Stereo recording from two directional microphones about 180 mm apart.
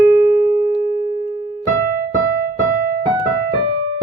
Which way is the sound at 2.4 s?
50° right (ahead or behind).